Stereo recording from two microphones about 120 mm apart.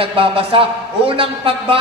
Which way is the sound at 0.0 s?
50° right (ahead or behind).